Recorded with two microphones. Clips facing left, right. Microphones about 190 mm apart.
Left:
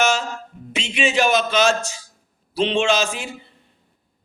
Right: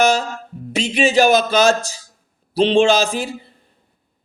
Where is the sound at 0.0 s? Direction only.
40° right (ahead or behind).